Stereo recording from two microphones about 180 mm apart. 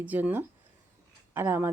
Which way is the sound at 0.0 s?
10° right (ahead or behind).